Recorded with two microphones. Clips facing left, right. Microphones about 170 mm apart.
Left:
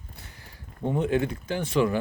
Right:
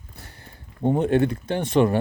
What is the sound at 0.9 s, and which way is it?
Speech, 55° right (ahead or behind).